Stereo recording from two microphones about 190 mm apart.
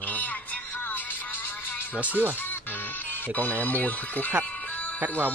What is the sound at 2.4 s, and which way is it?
Speech, 10° left (ahead or behind).